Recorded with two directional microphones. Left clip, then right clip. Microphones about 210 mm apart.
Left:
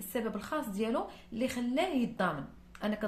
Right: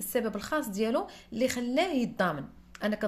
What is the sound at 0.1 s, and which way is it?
A woman's voice, 35° right (ahead or behind).